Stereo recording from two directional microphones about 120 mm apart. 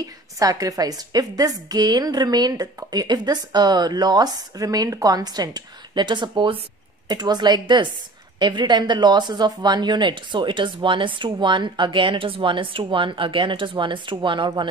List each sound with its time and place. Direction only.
0.0 s a woman's voice: 30° right (ahead or behind)